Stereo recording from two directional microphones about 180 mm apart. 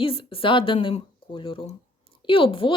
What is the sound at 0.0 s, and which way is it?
Speech, 30° left (ahead or behind).